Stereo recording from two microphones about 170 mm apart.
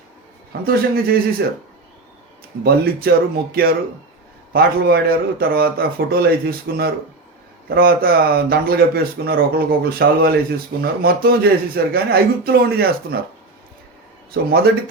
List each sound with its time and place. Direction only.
0.6 s speech: 60° right (ahead or behind)
2.6 s speech: 65° right (ahead or behind)